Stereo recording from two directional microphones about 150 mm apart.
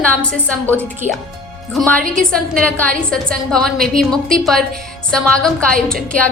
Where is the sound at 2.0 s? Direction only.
60° right (ahead or behind).